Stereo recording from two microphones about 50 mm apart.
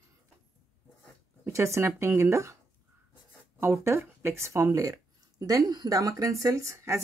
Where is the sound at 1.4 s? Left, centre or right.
Right.